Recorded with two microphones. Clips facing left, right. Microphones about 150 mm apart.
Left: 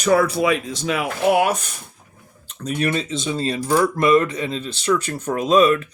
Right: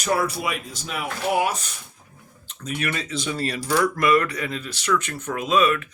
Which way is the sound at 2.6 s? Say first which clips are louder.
Left 6 dB; 40° left (ahead or behind).